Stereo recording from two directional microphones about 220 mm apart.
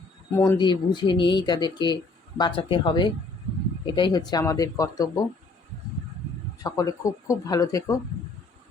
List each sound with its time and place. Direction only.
0.3 s speech: 20° left (ahead or behind)
6.6 s speech: 15° left (ahead or behind)